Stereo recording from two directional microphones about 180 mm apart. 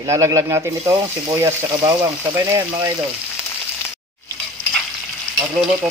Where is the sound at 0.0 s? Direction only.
15° right (ahead or behind).